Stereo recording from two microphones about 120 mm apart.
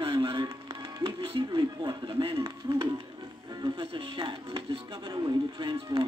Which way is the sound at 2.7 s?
40° right (ahead or behind).